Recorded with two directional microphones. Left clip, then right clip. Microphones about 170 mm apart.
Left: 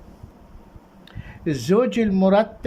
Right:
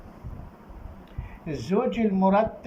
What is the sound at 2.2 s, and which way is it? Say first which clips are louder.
Speech: left 4 dB; 55° left (ahead or behind).